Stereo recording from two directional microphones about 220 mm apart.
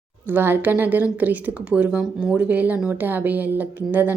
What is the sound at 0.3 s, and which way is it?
Speech, 10° right (ahead or behind).